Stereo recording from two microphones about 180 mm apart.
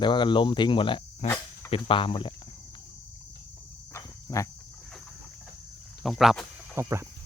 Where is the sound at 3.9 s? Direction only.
15° left (ahead or behind).